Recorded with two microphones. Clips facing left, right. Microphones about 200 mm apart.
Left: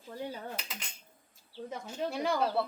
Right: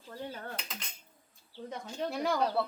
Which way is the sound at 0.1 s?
15° left (ahead or behind).